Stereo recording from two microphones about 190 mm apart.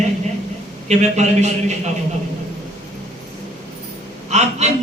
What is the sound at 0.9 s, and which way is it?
Speech, 35° right (ahead or behind).